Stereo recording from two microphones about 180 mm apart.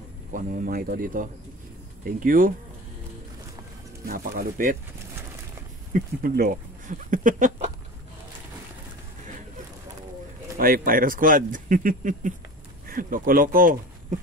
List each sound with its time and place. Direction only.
0.3 s speech: 45° right (ahead or behind)
4.0 s speech: 55° right (ahead or behind)
5.9 s speech: 55° right (ahead or behind)
10.6 s speech: 50° right (ahead or behind)